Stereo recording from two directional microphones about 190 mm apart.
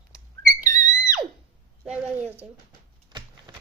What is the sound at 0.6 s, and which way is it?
Music, 15° left (ahead or behind).